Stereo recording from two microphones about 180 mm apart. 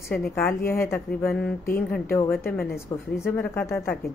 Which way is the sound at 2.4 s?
55° left (ahead or behind).